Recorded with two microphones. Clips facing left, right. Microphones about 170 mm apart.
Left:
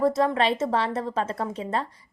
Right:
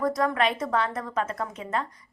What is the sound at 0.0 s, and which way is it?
A woman's voice, 25° left (ahead or behind).